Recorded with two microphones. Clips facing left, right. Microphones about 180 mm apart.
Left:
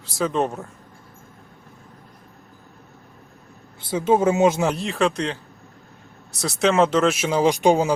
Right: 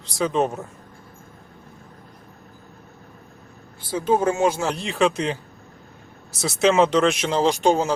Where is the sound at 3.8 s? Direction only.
25° left (ahead or behind).